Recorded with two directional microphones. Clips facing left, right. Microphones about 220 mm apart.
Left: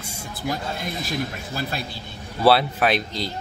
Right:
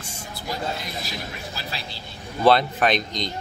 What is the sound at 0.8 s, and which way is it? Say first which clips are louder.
Speech: left 6 dB; 50° left (ahead or behind).